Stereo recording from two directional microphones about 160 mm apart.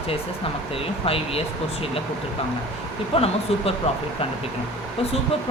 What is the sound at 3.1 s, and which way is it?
Speech, 35° left (ahead or behind).